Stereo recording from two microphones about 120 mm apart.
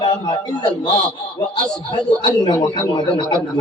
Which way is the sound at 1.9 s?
40° left (ahead or behind).